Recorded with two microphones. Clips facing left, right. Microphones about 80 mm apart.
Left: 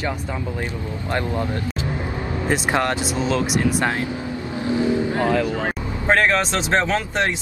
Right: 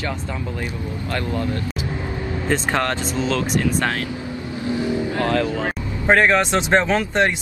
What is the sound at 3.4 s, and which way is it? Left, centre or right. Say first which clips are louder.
Speech: even; centre.